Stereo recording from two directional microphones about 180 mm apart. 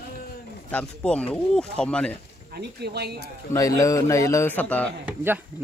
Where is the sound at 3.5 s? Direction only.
20° left (ahead or behind).